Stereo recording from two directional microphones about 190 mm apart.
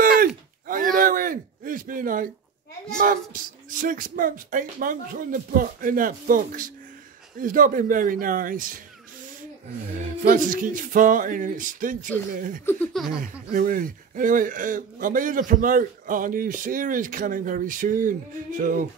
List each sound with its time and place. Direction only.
0.7 s a sound: 45° right (ahead or behind)
3.7 s a man's voice: 45° right (ahead or behind)
10.2 s a man's voice: 45° right (ahead or behind)
12.6 s laughter: 10° left (ahead or behind)
13.2 s a man's voice: 45° right (ahead or behind)